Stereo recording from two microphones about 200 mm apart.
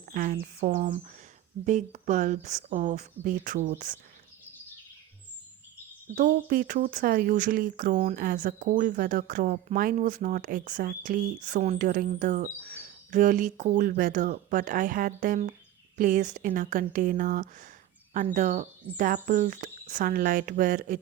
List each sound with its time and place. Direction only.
0.1 s speech: 45° right (ahead or behind)
6.1 s speech: 45° right (ahead or behind)